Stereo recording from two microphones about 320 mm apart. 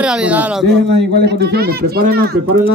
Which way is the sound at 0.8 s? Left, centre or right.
Right.